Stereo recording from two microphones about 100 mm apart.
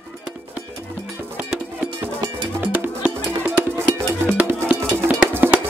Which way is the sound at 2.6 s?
15° right (ahead or behind).